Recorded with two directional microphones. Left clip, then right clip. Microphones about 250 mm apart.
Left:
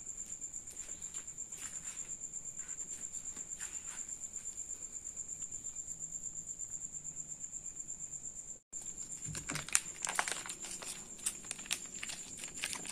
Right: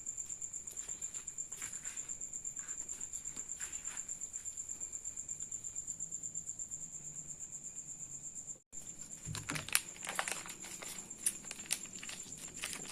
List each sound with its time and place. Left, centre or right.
9.3 s typing: centre
10.0 s a sound: centre
12.5 s horse: centre